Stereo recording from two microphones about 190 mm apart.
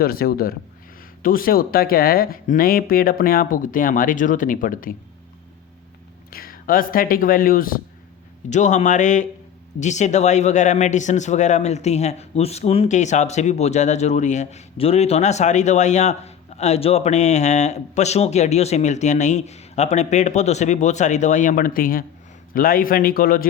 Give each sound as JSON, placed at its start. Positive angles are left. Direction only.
{"t": 0.0, "sound": "speech", "side_deg": 50}
{"t": 6.3, "sound": "speech", "side_deg": 50}